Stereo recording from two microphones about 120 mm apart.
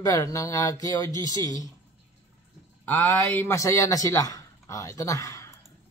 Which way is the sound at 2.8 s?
15° left (ahead or behind).